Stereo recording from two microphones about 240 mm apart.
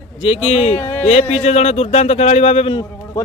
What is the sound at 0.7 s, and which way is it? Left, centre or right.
Speech, centre.